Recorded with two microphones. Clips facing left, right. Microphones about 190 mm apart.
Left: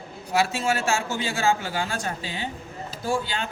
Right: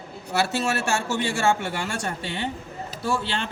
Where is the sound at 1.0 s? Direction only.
75° right (ahead or behind).